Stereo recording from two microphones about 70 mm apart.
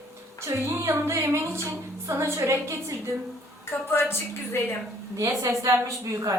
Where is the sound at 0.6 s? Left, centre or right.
Right.